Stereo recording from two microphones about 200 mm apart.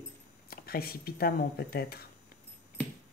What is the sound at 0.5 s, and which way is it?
Speech, 50° left (ahead or behind).